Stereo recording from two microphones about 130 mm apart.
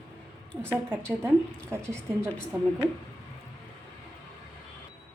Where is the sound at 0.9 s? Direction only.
15° right (ahead or behind).